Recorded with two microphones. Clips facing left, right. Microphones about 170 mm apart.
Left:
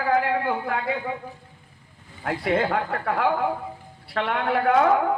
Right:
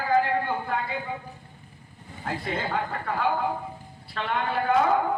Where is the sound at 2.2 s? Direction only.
65° left (ahead or behind).